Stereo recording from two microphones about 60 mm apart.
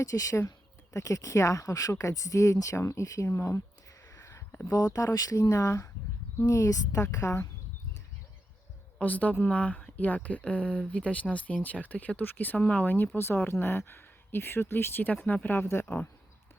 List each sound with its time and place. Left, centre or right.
0.0 s speech: left
4.1 s a sound: left
4.6 s speech: left
6.4 s speech: left
9.0 s a woman's voice: left